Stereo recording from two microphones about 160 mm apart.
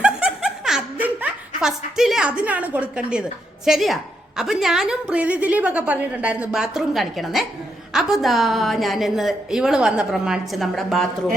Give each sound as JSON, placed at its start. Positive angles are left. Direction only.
{"t": 0.0, "sound": "laughter", "side_deg": -5}
{"t": 3.7, "sound": "a woman's voice", "side_deg": 0}